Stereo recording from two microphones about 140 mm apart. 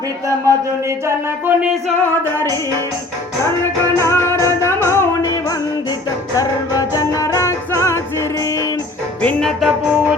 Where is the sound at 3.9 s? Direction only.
20° left (ahead or behind).